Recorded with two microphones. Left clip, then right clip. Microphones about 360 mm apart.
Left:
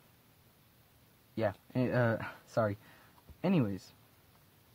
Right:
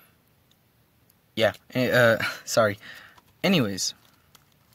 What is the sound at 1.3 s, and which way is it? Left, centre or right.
Speech, right.